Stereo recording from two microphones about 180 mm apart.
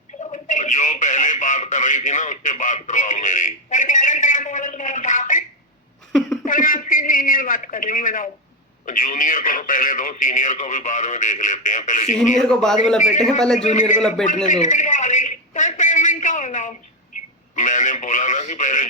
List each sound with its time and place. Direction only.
0.2 s speech: 40° left (ahead or behind)
6.4 s a man's voice: 50° left (ahead or behind)
12.5 s a man's voice: centre (ahead or behind)
13.0 s a man's voice: 45° left (ahead or behind)
14.4 s a sound: 45° left (ahead or behind)
17.5 s a man's voice: 45° left (ahead or behind)